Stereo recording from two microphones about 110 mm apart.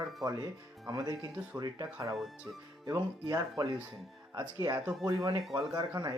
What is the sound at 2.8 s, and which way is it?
Speech, 35° right (ahead or behind).